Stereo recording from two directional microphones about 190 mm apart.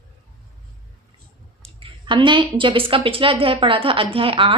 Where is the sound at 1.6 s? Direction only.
25° right (ahead or behind).